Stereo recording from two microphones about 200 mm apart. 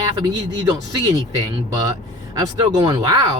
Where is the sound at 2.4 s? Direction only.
20° right (ahead or behind).